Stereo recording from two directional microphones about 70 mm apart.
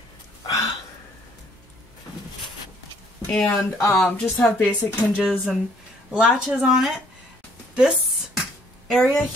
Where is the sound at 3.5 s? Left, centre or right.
Left.